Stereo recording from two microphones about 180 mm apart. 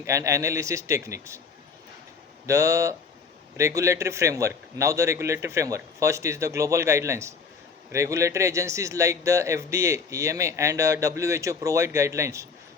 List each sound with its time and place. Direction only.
0.0 s speech: 15° right (ahead or behind)
2.5 s speech: 15° right (ahead or behind)